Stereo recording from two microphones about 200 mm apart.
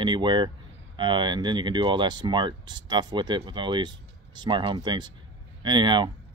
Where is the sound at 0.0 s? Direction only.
25° right (ahead or behind).